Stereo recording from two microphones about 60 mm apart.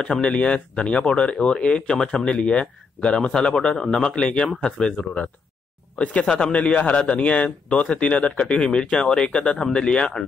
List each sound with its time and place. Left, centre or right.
0.0 s speech: centre